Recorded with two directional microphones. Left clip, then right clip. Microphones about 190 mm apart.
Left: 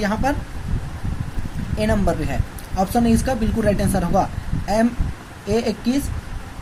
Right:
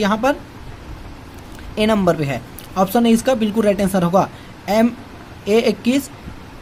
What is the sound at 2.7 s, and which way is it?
Speech, 35° right (ahead or behind).